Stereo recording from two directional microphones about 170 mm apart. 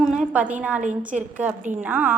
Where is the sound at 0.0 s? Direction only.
5° right (ahead or behind).